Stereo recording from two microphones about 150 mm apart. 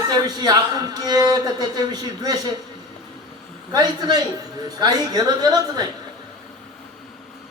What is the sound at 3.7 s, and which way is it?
A man's voice, 25° right (ahead or behind).